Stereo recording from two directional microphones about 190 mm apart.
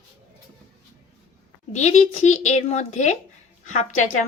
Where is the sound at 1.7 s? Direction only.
35° left (ahead or behind).